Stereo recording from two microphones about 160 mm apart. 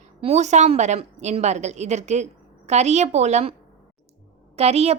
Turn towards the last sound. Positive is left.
turn(degrees=-40)  # may be behind; listen again after turning